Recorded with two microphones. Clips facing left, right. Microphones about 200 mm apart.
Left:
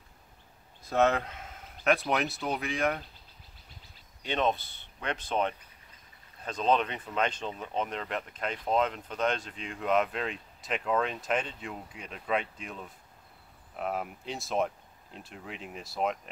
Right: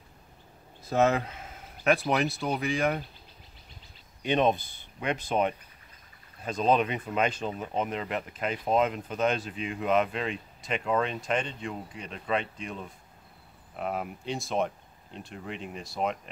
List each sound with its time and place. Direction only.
0.8 s speech: 5° right (ahead or behind)
4.2 s speech: 15° right (ahead or behind); by 16.2 s centre (ahead or behind)